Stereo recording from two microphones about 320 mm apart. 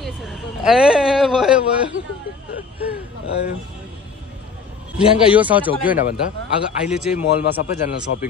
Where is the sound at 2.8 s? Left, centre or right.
Left.